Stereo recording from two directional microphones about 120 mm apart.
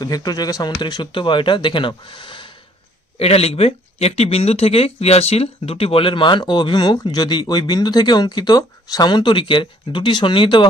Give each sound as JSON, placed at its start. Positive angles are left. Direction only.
{"t": 0.0, "sound": "speech", "side_deg": 35}
{"t": 3.2, "sound": "speech", "side_deg": 55}